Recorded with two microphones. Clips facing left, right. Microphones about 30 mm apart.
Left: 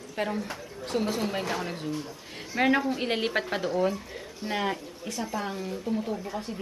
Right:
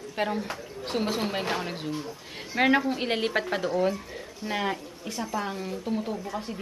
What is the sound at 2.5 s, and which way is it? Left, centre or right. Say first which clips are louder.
Speech: right 1 dB; centre.